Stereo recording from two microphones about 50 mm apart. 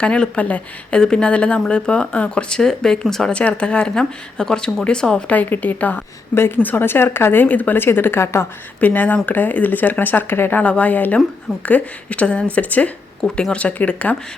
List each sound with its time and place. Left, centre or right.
0.0 s a woman's voice: left
3.3 s a woman's voice: left
5.3 s speech: left
7.4 s speech: left
7.8 s speech: left
8.8 s speech: left
10.6 s a woman's voice: left